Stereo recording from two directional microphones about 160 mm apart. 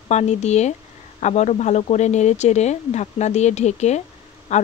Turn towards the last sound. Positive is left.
turn(degrees=45)  # may be behind; listen again after turning